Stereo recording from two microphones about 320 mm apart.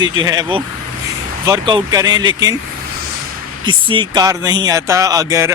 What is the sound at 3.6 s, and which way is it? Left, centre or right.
Speech, centre.